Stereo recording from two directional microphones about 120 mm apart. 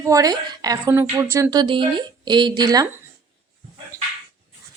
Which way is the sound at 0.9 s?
20° right (ahead or behind).